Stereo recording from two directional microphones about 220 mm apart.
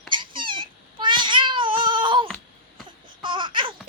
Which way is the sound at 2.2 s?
Centre (ahead or behind).